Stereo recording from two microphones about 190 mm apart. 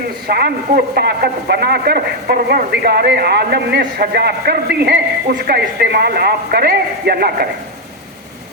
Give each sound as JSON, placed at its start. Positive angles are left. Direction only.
{"t": 0.3, "sound": "a man's voice", "side_deg": -55}